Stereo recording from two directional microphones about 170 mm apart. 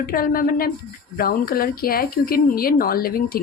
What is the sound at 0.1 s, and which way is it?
Speech, 60° left (ahead or behind).